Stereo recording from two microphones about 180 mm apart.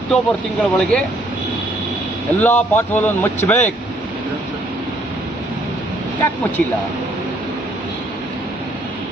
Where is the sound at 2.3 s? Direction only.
10° left (ahead or behind).